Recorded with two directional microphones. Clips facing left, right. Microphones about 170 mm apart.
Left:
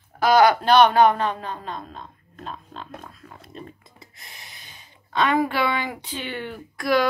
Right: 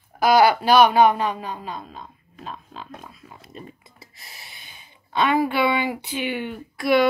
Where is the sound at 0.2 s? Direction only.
10° right (ahead or behind).